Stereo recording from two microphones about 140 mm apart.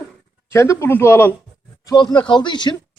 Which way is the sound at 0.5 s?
20° left (ahead or behind).